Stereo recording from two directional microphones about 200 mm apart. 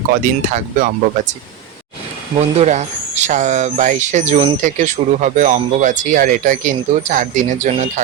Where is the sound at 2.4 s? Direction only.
35° right (ahead or behind).